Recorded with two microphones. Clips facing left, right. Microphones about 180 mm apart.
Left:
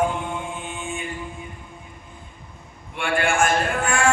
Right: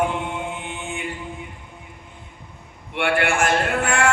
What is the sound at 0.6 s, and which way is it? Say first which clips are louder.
Chant: even; 65° right (ahead or behind).